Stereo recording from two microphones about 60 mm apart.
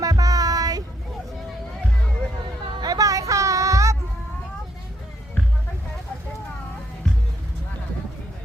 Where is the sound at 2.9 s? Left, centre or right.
Right.